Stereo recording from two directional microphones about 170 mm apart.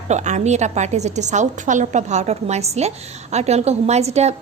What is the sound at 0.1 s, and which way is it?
A woman's voice, 45° right (ahead or behind).